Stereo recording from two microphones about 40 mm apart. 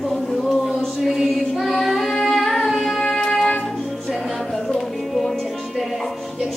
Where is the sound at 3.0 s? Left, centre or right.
Centre.